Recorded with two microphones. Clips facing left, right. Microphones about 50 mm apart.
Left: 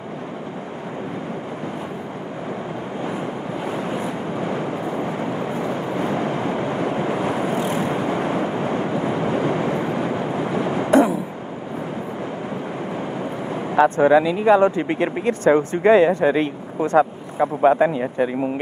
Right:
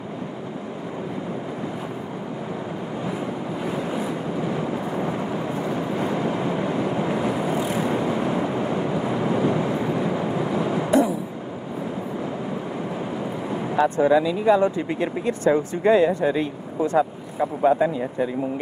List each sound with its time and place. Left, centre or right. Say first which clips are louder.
4.4 s vehicle: left 2 dB; left
6.1 s vehicle: left 1 dB; left
13.7 s speech: left 4 dB; left